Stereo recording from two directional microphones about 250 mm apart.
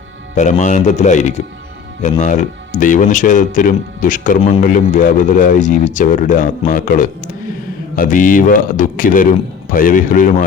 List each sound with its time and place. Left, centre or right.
0.6 s speech: left